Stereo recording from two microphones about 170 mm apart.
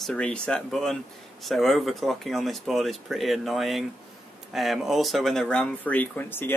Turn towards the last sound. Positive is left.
turn(degrees=10)  # may be behind; listen again after turning